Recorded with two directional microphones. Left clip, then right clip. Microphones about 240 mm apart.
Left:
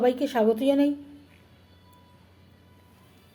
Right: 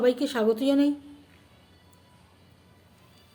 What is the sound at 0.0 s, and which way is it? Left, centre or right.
Speech, centre.